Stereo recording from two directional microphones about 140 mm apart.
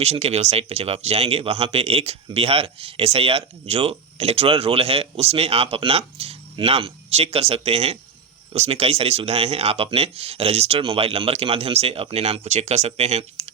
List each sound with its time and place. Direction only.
0.0 s speech: 50° right (ahead or behind)